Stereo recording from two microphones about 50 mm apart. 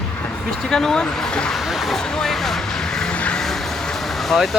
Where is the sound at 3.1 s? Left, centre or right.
Left.